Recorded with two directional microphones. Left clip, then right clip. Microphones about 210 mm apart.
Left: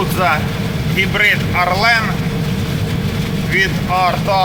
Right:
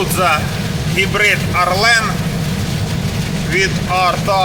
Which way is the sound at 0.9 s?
Centre (ahead or behind).